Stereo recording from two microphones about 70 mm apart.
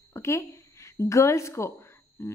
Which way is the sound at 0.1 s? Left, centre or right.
Left.